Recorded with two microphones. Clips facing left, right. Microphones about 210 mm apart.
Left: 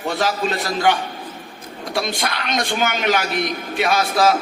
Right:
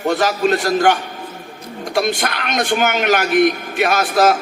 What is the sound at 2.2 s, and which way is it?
A man's voice, 50° right (ahead or behind).